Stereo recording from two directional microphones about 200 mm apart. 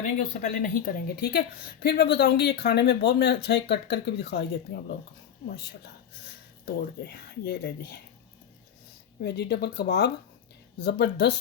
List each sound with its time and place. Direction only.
0.2 s a woman's voice: 40° left (ahead or behind); by 4.9 s 55° left (ahead or behind)
7.0 s speech: 55° left (ahead or behind)
9.2 s a woman's voice: 55° left (ahead or behind)